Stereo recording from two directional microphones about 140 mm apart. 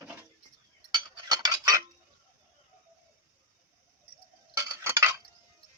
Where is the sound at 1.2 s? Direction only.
30° right (ahead or behind).